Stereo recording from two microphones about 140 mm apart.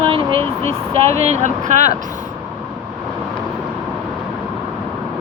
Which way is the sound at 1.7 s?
55° right (ahead or behind).